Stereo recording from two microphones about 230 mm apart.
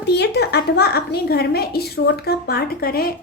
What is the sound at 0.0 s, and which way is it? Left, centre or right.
A woman's voice, left.